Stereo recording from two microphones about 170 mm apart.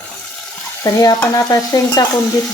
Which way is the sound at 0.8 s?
25° left (ahead or behind).